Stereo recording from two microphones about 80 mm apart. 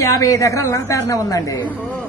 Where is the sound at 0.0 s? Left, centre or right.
Left.